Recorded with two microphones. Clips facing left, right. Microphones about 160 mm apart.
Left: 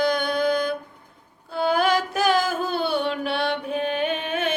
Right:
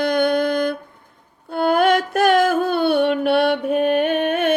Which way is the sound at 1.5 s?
55° right (ahead or behind).